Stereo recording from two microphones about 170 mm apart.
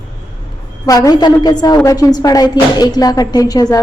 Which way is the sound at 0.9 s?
20° left (ahead or behind).